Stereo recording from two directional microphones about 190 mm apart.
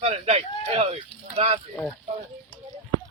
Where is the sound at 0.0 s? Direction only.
35° right (ahead or behind).